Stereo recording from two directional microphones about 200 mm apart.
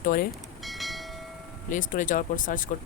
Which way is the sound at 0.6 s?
Centre (ahead or behind).